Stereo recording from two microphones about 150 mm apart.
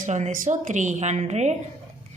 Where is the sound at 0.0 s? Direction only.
55° right (ahead or behind).